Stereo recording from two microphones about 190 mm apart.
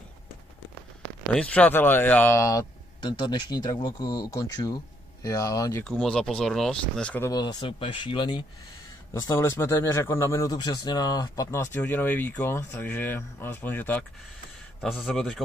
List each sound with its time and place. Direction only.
1.3 s speech: 5° left (ahead or behind)
5.9 s speech: 5° left (ahead or behind)
7.2 s speech: 20° left (ahead or behind); by 15.4 s centre (ahead or behind)